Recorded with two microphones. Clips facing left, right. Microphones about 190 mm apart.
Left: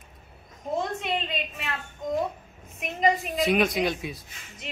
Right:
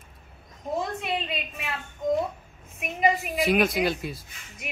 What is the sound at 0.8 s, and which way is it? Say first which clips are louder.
Speech: left 1 dB; 5° right (ahead or behind).